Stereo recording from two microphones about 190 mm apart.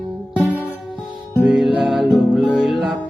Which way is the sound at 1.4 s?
Centre (ahead or behind).